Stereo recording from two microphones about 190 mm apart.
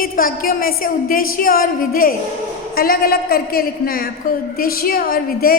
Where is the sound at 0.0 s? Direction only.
50° left (ahead or behind).